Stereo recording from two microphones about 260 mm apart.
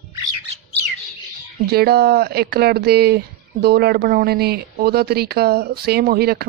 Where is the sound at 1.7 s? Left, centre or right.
Right.